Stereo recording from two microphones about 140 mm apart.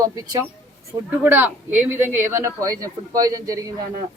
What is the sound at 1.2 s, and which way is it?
A man's voice, 10° right (ahead or behind).